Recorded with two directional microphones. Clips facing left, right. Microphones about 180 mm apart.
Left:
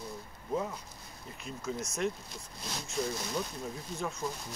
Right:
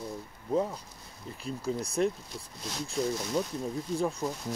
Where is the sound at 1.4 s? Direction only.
35° right (ahead or behind).